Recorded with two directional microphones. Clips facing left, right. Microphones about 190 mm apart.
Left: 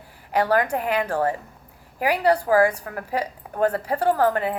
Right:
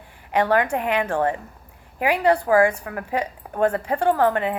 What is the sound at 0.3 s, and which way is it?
A woman's voice, 40° left (ahead or behind).